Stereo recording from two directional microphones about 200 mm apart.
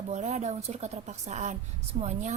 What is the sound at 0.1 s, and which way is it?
A woman's voice, 35° right (ahead or behind).